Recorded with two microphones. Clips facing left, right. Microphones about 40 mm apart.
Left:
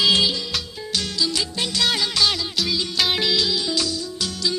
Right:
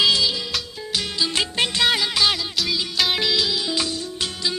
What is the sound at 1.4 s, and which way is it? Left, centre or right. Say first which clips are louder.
Music: right 3 dB; right.